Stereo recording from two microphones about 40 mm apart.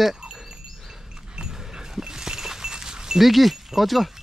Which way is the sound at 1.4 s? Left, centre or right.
Centre.